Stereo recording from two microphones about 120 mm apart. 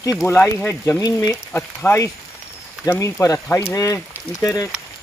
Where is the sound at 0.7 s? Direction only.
25° left (ahead or behind).